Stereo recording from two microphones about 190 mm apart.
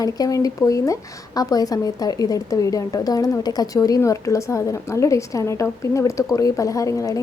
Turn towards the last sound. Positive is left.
turn(degrees=15)  # may be behind; listen again after turning